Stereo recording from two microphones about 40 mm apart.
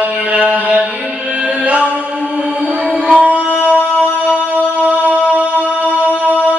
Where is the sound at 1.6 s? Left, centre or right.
Right.